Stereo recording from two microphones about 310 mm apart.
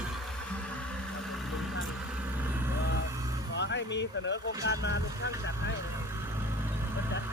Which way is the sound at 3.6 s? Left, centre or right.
Left.